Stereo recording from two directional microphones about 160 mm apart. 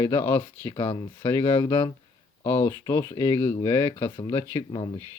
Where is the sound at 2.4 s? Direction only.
15° left (ahead or behind).